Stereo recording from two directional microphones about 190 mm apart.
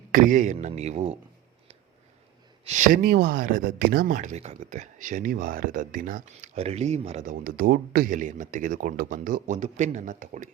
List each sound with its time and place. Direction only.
0.1 s a man's voice: 45° right (ahead or behind)
2.6 s speech: 40° right (ahead or behind)